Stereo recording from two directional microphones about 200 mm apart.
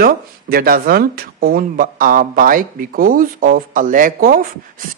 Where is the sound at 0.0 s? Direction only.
50° right (ahead or behind).